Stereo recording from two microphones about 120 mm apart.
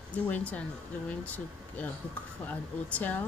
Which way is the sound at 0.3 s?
10° left (ahead or behind).